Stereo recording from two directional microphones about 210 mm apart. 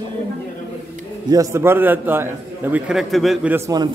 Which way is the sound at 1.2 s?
15° right (ahead or behind).